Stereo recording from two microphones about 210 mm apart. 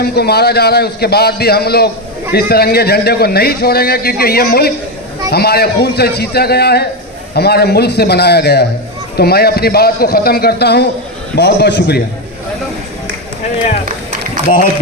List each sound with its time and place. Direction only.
0.0 s a man's voice: 50° left (ahead or behind)